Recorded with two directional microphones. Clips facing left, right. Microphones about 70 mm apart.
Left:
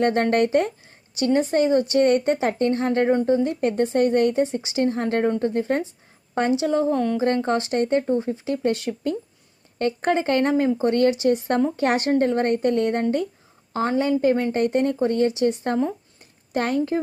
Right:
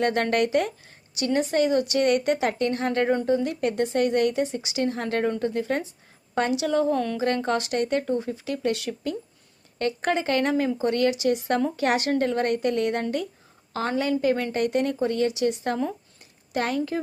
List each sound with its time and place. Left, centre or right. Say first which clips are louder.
0.0 s a woman's voice: left 3 dB; left